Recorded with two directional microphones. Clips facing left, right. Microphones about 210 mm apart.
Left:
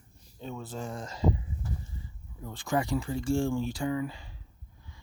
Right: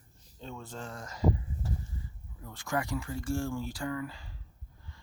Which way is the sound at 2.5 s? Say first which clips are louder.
Left 4 dB; 30° left (ahead or behind).